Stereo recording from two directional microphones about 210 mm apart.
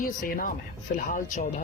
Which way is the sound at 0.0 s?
40° left (ahead or behind).